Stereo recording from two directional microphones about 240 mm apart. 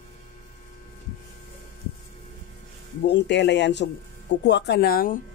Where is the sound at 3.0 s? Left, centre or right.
Left.